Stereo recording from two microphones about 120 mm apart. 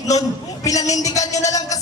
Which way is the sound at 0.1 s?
30° left (ahead or behind).